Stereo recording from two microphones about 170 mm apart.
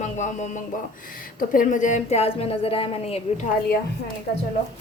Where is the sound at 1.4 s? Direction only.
50° left (ahead or behind); by 3.2 s 35° left (ahead or behind).